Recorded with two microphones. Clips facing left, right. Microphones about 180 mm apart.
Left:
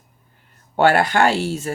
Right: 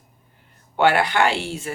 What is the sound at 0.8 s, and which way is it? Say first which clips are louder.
Speech: left 2 dB; 45° left (ahead or behind).